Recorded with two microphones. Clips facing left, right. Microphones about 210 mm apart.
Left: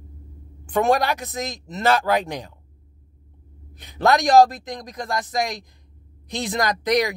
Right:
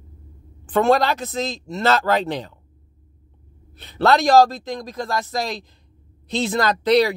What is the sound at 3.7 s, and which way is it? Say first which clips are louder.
Speech: right 2 dB; 15° left (ahead or behind).